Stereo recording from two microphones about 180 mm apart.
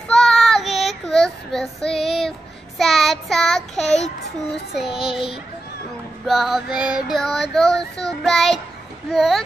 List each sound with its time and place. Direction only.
0.1 s child singing: centre (ahead or behind)
3.7 s child singing: 35° left (ahead or behind)
6.2 s female singing: centre (ahead or behind)